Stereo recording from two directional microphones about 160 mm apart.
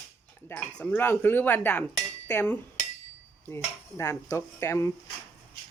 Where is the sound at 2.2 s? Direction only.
15° left (ahead or behind).